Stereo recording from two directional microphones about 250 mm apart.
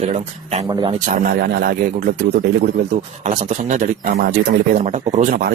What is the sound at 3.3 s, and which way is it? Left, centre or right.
A man's voice, right.